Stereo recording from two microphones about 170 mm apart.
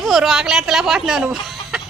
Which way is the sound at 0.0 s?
Centre (ahead or behind).